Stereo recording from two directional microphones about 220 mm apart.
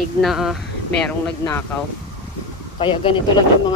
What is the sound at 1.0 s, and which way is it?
Speech, 10° left (ahead or behind).